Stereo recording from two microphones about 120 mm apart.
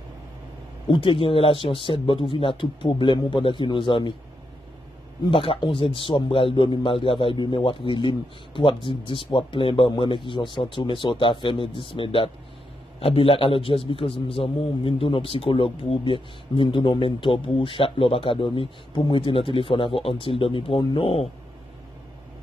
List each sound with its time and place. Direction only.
0.8 s a man's voice: 45° left (ahead or behind)
5.3 s a man's voice: 50° left (ahead or behind)